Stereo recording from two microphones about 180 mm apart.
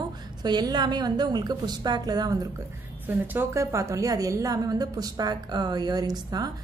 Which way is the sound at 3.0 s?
10° right (ahead or behind).